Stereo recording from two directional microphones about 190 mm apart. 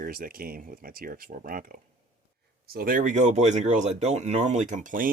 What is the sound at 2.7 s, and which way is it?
Speech, 45° right (ahead or behind).